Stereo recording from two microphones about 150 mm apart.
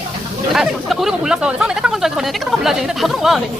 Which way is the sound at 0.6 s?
Centre (ahead or behind).